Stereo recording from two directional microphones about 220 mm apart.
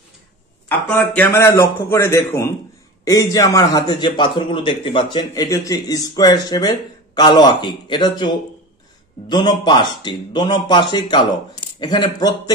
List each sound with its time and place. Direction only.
0.7 s a man's voice: 10° left (ahead or behind)